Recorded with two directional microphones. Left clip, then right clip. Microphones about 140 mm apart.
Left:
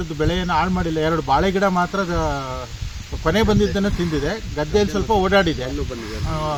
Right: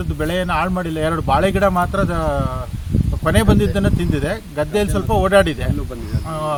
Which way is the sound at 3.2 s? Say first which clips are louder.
Right 1 dB; 45° right (ahead or behind).